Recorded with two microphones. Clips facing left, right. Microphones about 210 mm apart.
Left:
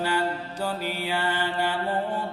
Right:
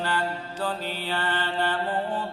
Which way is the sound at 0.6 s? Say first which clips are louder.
Left 1 dB; 10° left (ahead or behind).